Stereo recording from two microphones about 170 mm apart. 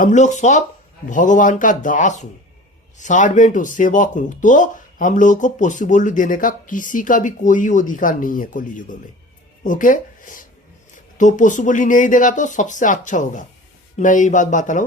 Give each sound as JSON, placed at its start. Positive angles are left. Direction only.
{"t": 0.0, "sound": "speech", "side_deg": 45}